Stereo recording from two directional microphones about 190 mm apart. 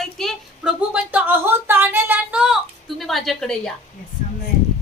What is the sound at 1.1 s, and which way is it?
Speech, 10° right (ahead or behind).